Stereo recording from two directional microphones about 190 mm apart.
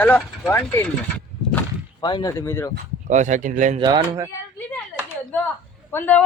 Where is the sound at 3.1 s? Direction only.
40° right (ahead or behind).